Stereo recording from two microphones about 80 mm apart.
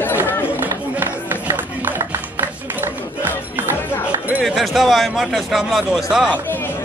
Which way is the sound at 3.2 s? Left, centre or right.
Right.